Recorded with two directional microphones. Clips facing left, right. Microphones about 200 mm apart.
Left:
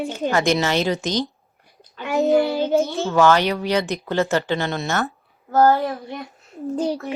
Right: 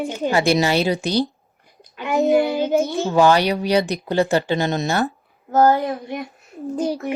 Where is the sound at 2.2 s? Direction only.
15° right (ahead or behind).